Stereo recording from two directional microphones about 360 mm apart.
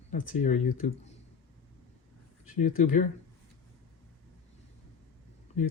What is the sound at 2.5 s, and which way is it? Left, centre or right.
Speech, left.